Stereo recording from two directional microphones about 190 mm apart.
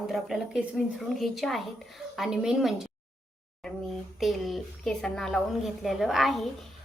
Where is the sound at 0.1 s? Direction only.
Centre (ahead or behind).